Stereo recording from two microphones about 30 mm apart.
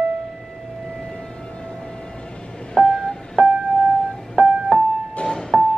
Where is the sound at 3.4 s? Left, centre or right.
Right.